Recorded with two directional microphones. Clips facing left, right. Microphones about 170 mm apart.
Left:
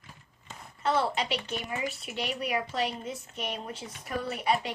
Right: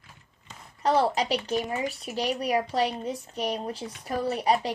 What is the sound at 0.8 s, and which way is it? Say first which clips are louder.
A woman's voice: right 4 dB; 35° right (ahead or behind).